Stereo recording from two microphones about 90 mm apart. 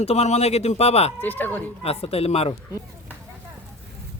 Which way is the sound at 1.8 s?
90° left.